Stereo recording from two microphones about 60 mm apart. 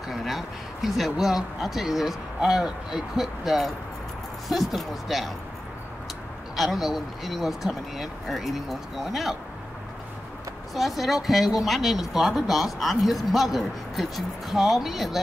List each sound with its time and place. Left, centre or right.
0.1 s speech: centre
6.5 s speech: centre
10.7 s speech: centre